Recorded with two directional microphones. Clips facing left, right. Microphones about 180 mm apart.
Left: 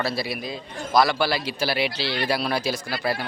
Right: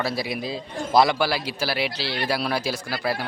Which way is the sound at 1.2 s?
10° right (ahead or behind).